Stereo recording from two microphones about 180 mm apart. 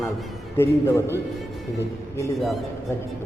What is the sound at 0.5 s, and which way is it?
Speech, 15° left (ahead or behind).